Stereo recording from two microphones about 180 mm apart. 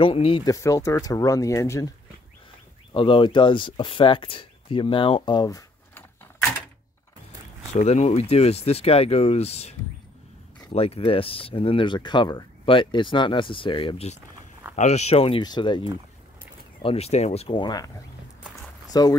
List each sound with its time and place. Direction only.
0.0 s speech: 30° left (ahead or behind)
0.5 s speech: 20° left (ahead or behind)
2.9 s speech: 30° left (ahead or behind)
7.7 s speech: 35° left (ahead or behind); by 19.1 s 20° left (ahead or behind)